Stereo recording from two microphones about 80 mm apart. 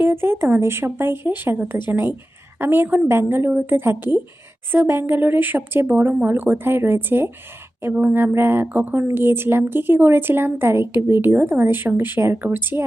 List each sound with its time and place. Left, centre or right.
0.0 s speech: right